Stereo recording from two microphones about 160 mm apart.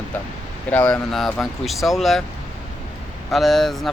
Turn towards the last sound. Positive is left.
turn(degrees=0)  # may be behind; listen again after turning